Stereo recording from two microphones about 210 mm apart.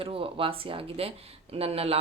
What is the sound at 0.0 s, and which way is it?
Speech, 25° right (ahead or behind).